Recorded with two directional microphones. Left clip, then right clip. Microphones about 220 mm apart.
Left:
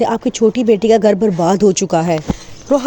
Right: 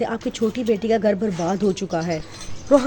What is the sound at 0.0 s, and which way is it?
Speech, 25° left (ahead or behind).